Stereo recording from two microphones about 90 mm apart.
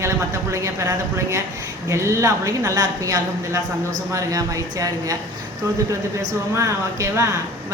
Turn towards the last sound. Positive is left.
turn(degrees=-30)  # may be behind; listen again after turning